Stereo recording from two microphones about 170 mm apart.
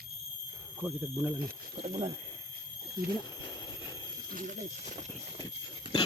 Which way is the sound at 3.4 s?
25° left (ahead or behind).